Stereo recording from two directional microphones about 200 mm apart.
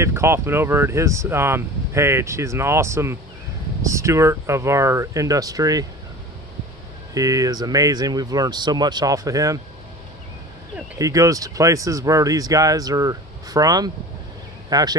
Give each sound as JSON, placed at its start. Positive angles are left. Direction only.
{"t": 0.0, "sound": "speech", "side_deg": -10}
{"t": 7.2, "sound": "speech", "side_deg": -15}
{"t": 11.0, "sound": "speech", "side_deg": -15}